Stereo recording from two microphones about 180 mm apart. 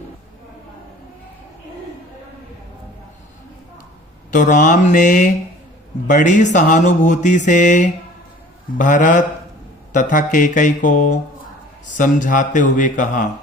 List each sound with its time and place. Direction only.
4.3 s mantra: 45° left (ahead or behind)